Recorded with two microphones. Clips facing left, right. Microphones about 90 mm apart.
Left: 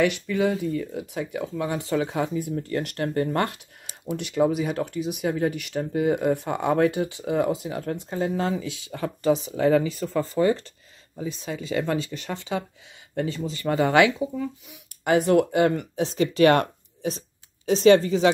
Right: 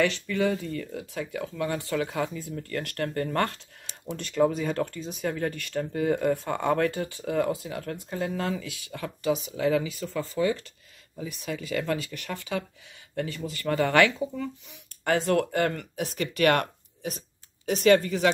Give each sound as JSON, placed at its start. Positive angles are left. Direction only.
{"t": 0.0, "sound": "speech", "side_deg": 15}
{"t": 11.1, "sound": "speech", "side_deg": 25}